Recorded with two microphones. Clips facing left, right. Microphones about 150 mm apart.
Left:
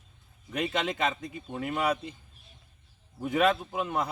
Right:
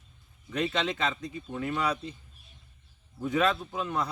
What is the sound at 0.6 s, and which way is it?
Speech, 10° left (ahead or behind).